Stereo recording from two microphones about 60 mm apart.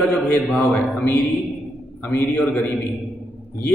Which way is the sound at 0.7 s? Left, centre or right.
Centre.